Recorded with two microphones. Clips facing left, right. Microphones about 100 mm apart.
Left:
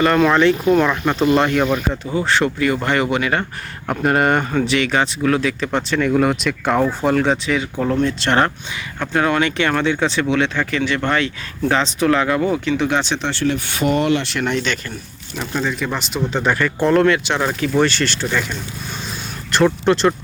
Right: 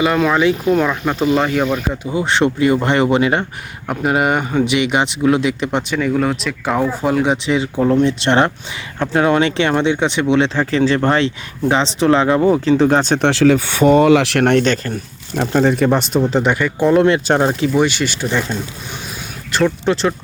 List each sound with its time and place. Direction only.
0.0 s speech: 5° right (ahead or behind); by 3.4 s 25° right (ahead or behind)
3.8 s speech: 5° right (ahead or behind)
6.0 s speech: centre (ahead or behind)
7.4 s speech: 20° right (ahead or behind)
11.6 s speech: 20° right (ahead or behind); by 13.2 s 45° right (ahead or behind)
14.2 s speech: 70° right (ahead or behind)
16.4 s speech: 15° right (ahead or behind)
17.2 s speech: 45° right (ahead or behind)
17.7 s speech: 15° right (ahead or behind)
18.3 s speech: 25° right (ahead or behind)
19.5 s speech: centre (ahead or behind)